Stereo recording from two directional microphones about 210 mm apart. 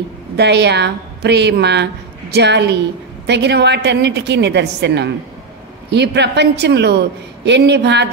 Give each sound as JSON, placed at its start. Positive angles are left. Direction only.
{"t": 0.4, "sound": "a woman's voice", "side_deg": -55}